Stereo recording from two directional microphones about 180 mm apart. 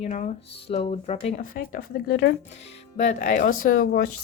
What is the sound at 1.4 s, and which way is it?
Speech, 50° left (ahead or behind).